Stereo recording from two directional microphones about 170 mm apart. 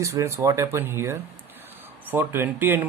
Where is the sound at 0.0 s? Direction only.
20° right (ahead or behind).